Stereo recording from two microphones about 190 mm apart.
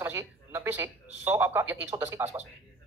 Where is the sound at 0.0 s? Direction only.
10° right (ahead or behind).